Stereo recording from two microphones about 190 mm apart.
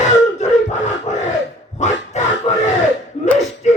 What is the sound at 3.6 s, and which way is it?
Music, 35° left (ahead or behind).